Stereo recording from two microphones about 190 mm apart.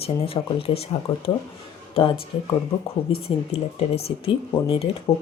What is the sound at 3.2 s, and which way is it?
Speech, 35° left (ahead or behind).